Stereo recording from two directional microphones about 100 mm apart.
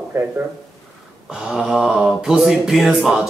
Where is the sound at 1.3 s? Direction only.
5° right (ahead or behind).